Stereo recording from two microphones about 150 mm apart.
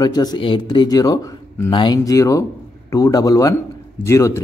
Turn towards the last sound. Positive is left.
turn(degrees=20)  # may be behind; listen again after turning